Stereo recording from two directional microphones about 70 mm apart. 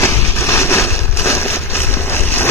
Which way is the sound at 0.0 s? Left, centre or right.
Left.